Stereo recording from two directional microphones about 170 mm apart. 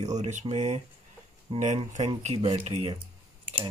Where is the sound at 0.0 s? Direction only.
40° right (ahead or behind).